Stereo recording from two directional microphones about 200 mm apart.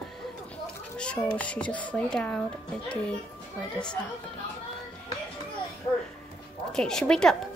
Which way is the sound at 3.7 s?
5° left (ahead or behind).